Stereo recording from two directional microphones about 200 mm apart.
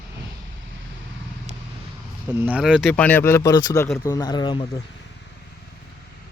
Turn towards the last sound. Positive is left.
turn(degrees=20)  # may be behind; listen again after turning